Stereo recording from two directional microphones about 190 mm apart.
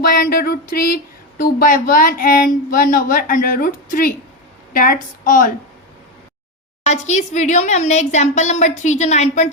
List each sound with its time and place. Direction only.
0.0 s speech: 50° left (ahead or behind)
6.8 s a woman's voice: 35° left (ahead or behind)